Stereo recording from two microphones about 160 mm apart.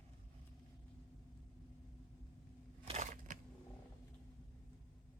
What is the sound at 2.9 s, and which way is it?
Crushing, 45° right (ahead or behind).